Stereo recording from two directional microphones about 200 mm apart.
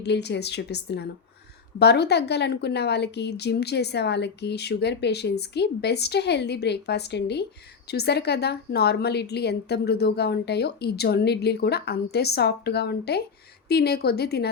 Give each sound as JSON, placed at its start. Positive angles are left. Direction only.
{"t": 0.0, "sound": "a woman's voice", "side_deg": 55}